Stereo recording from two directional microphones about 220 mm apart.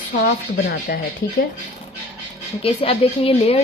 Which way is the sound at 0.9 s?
45° left (ahead or behind).